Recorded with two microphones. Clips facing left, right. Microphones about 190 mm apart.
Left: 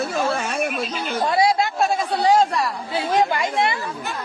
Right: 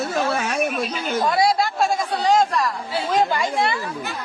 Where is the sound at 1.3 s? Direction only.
25° left (ahead or behind).